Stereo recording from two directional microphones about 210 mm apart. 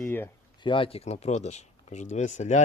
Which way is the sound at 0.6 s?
25° left (ahead or behind).